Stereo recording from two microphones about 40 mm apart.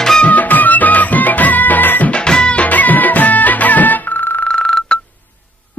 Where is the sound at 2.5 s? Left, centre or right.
Left.